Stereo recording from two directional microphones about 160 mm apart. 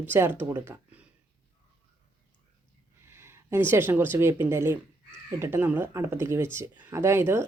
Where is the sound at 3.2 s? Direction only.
15° right (ahead or behind).